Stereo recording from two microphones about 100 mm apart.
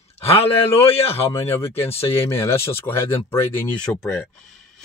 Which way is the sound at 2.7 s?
25° left (ahead or behind).